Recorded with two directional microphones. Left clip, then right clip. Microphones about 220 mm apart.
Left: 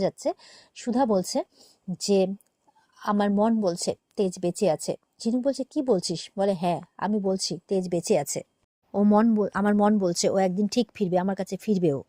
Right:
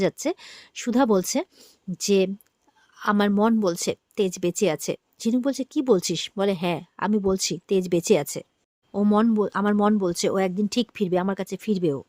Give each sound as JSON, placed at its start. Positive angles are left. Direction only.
{"t": 0.2, "sound": "a woman's voice", "side_deg": -15}